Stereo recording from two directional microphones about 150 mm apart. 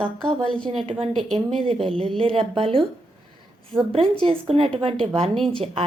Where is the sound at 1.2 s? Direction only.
5° left (ahead or behind).